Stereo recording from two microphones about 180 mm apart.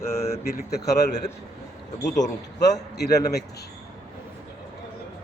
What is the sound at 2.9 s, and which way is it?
Speech, 65° left (ahead or behind).